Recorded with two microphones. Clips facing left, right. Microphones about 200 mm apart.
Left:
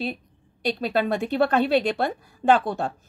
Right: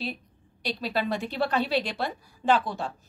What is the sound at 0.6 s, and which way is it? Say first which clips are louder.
A woman's voice: left 6 dB; 50° left (ahead or behind).